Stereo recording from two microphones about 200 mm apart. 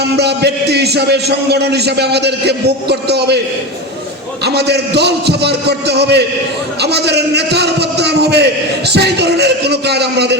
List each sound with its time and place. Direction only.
0.0 s a man's voice: 55° right (ahead or behind)
4.4 s a man's voice: 55° right (ahead or behind)